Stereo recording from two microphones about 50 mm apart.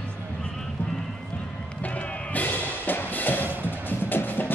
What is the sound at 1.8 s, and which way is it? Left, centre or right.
Music, left.